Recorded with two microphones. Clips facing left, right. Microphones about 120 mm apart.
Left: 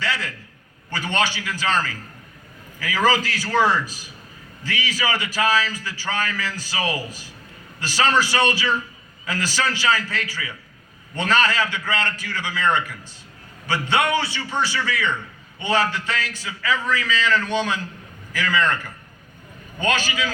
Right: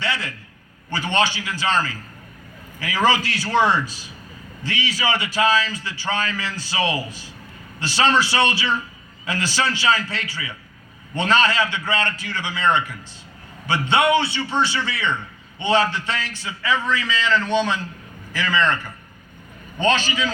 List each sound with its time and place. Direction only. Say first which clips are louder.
0.0 s a sound: right 1 dB; 20° right (ahead or behind)
0.9 s a man's voice: right 2 dB; 20° right (ahead or behind)
19.8 s a man's voice: right 3 dB; 25° right (ahead or behind)